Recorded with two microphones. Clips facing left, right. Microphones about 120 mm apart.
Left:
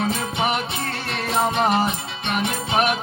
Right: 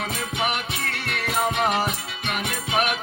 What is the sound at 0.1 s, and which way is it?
Music, 30° left (ahead or behind).